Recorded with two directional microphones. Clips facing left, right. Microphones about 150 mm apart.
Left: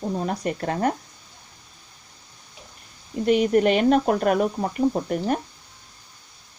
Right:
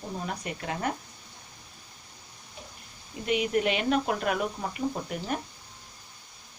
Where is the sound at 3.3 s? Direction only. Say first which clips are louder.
Left 8 dB; 40° left (ahead or behind).